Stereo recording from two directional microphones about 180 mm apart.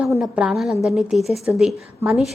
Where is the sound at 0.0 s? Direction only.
5° right (ahead or behind).